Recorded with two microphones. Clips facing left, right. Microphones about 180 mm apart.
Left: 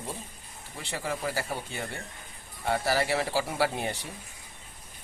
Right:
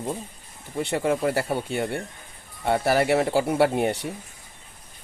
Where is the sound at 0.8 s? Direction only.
60° right (ahead or behind).